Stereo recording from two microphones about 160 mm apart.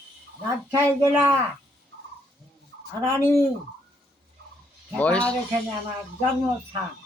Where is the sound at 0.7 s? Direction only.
20° right (ahead or behind).